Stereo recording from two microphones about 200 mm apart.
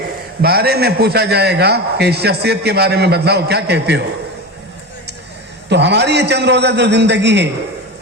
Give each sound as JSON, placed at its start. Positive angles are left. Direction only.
{"t": 0.4, "sound": "a man's voice", "side_deg": -50}
{"t": 5.6, "sound": "a man's voice", "side_deg": -60}